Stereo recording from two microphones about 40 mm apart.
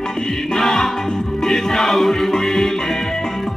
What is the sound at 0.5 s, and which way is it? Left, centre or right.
Music, centre.